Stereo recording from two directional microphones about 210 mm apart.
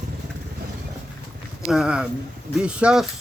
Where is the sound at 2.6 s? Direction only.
5° right (ahead or behind).